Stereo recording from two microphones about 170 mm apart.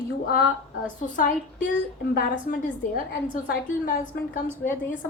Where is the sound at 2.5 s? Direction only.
70° left (ahead or behind).